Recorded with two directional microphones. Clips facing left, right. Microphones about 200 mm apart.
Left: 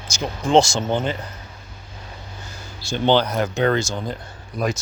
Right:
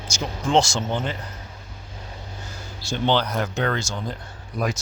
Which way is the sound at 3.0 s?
Centre (ahead or behind).